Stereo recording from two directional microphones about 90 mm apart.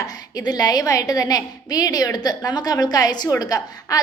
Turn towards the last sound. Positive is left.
turn(degrees=45)  # may be behind; listen again after turning